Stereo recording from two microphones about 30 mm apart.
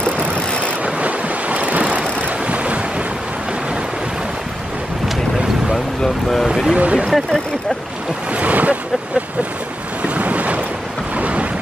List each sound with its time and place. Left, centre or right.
0.8 s waves: right
6.5 s speech: right
6.8 s speech: right
8.4 s a sound: right
10.0 s boat: right
11.1 s thunder: right